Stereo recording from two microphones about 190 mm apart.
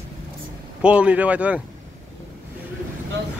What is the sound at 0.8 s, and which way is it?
Speech, 5° right (ahead or behind).